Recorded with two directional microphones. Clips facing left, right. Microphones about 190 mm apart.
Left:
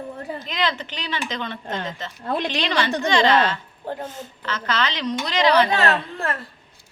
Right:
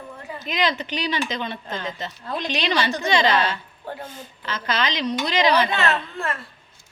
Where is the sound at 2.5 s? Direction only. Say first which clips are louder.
Right 4 dB; 15° right (ahead or behind).